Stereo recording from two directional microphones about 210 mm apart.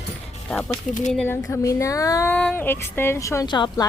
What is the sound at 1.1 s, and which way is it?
Speech, 5° left (ahead or behind).